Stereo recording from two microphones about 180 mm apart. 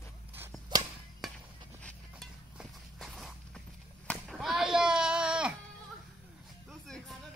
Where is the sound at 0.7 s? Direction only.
20° right (ahead or behind).